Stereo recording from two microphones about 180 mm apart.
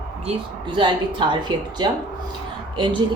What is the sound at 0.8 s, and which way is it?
Speech, 25° right (ahead or behind).